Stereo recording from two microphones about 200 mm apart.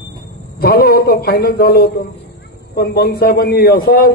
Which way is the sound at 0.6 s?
50° left (ahead or behind).